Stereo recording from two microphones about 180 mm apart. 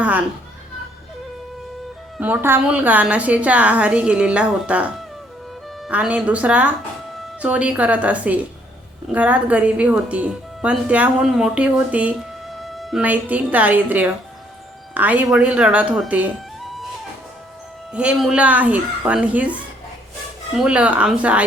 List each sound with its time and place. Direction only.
2.1 s speech: 10° right (ahead or behind)
17.9 s speech: 5° right (ahead or behind)
20.6 s speech: 5° right (ahead or behind)